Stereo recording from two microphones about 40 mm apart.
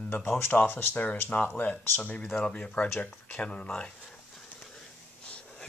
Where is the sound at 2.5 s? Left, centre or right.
Left.